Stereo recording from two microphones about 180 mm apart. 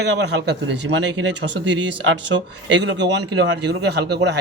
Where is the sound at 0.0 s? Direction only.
75° right (ahead or behind).